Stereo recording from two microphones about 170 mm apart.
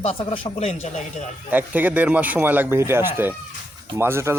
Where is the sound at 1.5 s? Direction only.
10° right (ahead or behind).